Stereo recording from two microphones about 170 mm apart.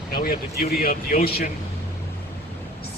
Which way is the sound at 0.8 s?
60° left (ahead or behind).